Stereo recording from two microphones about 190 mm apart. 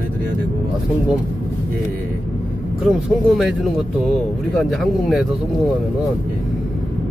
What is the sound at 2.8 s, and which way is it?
Speech, centre (ahead or behind).